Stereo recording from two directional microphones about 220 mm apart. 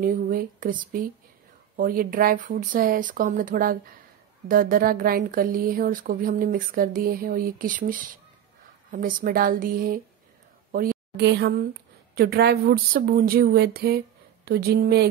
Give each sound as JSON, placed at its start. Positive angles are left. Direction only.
{"t": 0.0, "sound": "a woman's voice", "side_deg": -40}